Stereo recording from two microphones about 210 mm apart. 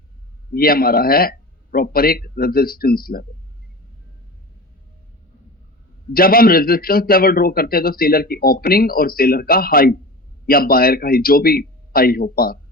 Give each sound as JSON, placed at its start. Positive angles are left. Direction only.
{"t": 0.5, "sound": "a man's voice", "side_deg": 45}
{"t": 6.1, "sound": "a man's voice", "side_deg": 45}